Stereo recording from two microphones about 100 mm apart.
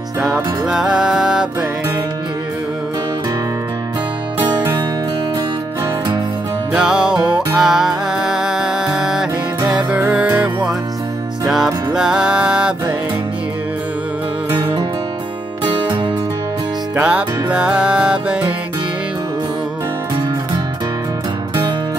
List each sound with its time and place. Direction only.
0.2 s music: 5° right (ahead or behind)
6.7 s music: 10° right (ahead or behind)
11.4 s music: 5° right (ahead or behind)
16.9 s music: 10° right (ahead or behind)